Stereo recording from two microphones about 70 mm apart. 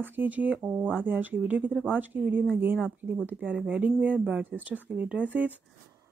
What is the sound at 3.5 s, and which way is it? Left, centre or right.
Speech, centre.